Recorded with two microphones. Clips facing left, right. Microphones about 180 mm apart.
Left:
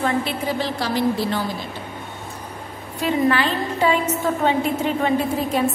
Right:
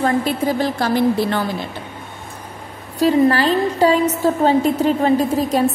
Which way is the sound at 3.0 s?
40° right (ahead or behind).